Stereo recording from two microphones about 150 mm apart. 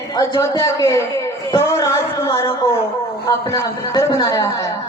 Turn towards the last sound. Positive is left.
turn(degrees=20)  # may be behind; listen again after turning